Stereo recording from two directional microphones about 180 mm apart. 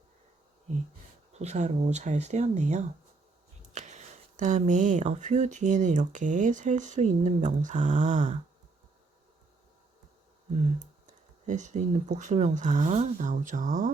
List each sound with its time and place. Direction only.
1.3 s speech: 40° right (ahead or behind)
10.5 s speech: 40° right (ahead or behind)